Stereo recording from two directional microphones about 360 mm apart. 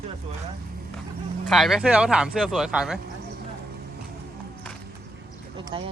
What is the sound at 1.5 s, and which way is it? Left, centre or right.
Speech, centre.